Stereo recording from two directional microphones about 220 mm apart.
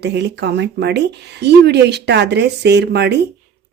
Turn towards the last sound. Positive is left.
turn(degrees=-50)  # may be behind; listen again after turning